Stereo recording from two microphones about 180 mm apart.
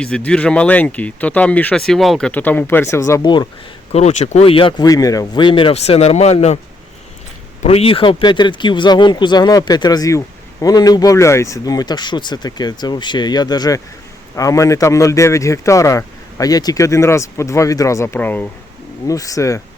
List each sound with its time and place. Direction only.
0.0 s speech: 5° left (ahead or behind); by 3.5 s 25° left (ahead or behind)
3.9 s speech: 40° left (ahead or behind)
7.6 s speech: 35° left (ahead or behind); by 19.6 s 15° left (ahead or behind)